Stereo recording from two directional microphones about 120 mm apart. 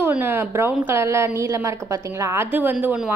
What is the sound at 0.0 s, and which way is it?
A woman's voice, 15° right (ahead or behind).